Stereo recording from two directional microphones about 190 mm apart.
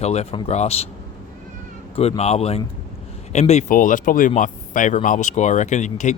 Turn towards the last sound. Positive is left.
turn(degrees=40)  # may be behind; listen again after turning